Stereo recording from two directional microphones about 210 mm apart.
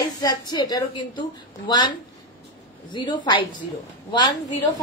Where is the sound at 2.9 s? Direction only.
20° left (ahead or behind).